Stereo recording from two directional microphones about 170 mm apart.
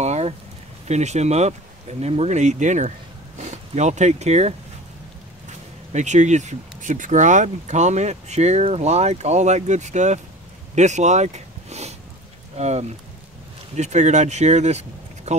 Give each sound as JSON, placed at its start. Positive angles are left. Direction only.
{"t": 0.0, "sound": "a sound", "side_deg": -40}
{"t": 0.8, "sound": "speech", "side_deg": -40}
{"t": 5.9, "sound": "speech", "side_deg": -45}